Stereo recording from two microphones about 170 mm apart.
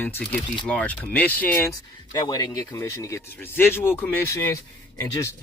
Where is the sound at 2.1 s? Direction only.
25° left (ahead or behind).